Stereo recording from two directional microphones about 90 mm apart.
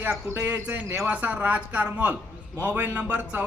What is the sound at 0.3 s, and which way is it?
A man's voice, 25° right (ahead or behind).